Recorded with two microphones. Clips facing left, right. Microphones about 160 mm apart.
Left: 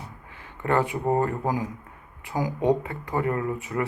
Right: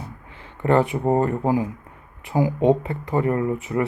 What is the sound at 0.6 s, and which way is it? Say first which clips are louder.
Speech: right 5 dB; 25° right (ahead or behind).